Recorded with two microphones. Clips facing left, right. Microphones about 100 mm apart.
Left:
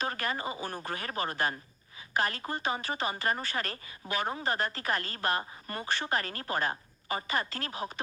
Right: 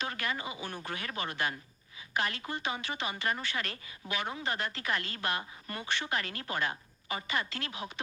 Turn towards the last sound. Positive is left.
turn(degrees=40)  # may be behind; listen again after turning